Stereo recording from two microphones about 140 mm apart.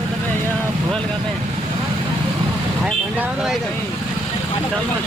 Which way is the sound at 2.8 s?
5° right (ahead or behind).